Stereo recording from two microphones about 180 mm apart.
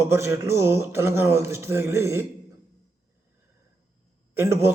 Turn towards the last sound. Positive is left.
turn(degrees=-15)  # may be behind; listen again after turning